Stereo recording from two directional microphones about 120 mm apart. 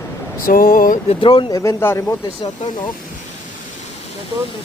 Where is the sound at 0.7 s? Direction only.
90° left.